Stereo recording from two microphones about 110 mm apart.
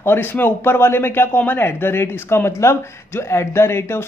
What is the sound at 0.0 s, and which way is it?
Speech, 20° left (ahead or behind).